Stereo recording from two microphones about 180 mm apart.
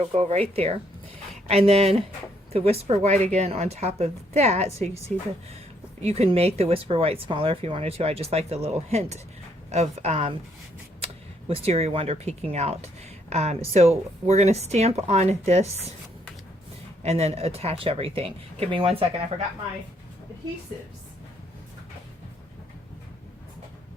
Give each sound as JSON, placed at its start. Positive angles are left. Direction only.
{"t": 0.0, "sound": "speech", "side_deg": -35}
{"t": 17.0, "sound": "speech", "side_deg": -35}